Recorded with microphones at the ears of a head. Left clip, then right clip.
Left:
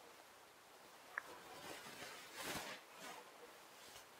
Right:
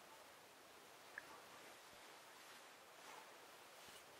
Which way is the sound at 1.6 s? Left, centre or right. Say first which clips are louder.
Left 8 dB; left.